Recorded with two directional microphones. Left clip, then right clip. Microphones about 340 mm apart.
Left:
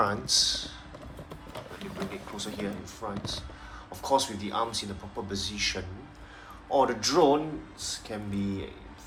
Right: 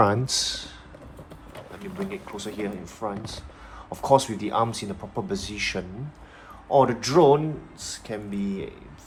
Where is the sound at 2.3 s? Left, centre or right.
Centre.